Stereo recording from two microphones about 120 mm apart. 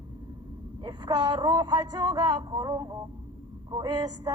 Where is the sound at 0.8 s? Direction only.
40° right (ahead or behind).